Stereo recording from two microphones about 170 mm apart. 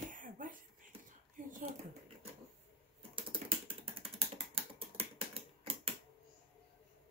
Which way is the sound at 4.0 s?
35° right (ahead or behind).